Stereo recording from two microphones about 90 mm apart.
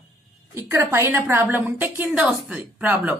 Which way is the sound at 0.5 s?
30° right (ahead or behind).